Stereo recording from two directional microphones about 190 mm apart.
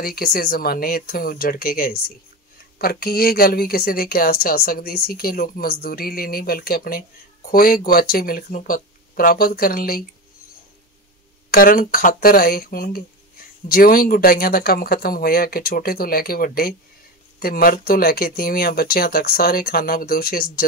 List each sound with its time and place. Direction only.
0.0 s speech: 50° left (ahead or behind)
11.5 s speech: 50° left (ahead or behind)